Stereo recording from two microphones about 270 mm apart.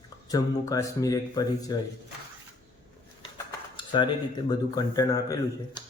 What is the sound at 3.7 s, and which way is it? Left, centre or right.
Speech, centre.